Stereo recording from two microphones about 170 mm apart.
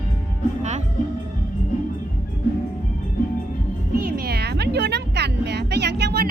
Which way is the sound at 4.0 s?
60° right (ahead or behind).